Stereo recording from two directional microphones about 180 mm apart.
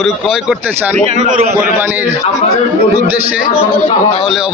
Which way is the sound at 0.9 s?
40° right (ahead or behind).